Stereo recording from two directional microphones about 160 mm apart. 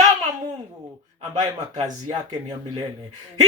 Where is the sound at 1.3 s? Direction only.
25° right (ahead or behind).